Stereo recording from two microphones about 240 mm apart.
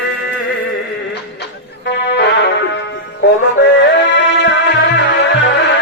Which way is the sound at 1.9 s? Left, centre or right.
Left.